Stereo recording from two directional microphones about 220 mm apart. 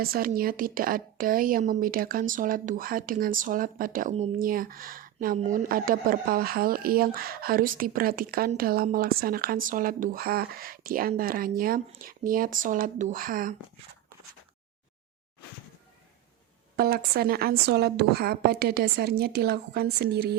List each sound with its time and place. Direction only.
0.0 s a woman's voice: 40° right (ahead or behind)
16.7 s a woman's voice: 45° right (ahead or behind)